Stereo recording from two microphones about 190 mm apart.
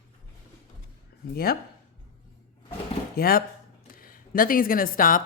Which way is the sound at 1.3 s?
50° left (ahead or behind).